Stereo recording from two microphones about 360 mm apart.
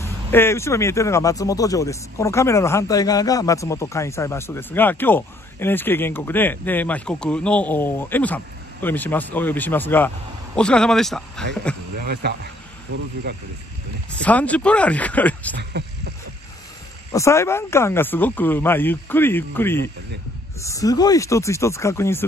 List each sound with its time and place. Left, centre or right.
0.0 s speech: centre
12.0 s speech: right
14.2 s speech: centre
15.8 s speech: right
17.1 s speech: centre